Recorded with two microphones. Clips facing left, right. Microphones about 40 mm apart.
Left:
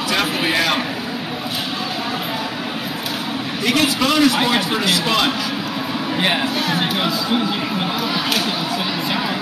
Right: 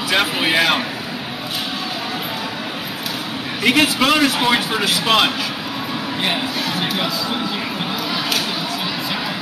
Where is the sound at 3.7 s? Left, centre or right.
Centre.